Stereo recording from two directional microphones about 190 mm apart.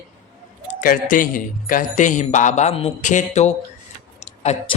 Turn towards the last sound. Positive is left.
turn(degrees=35)  # may be behind; listen again after turning